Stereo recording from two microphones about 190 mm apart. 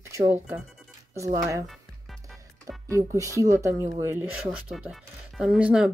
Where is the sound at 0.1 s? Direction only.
15° right (ahead or behind).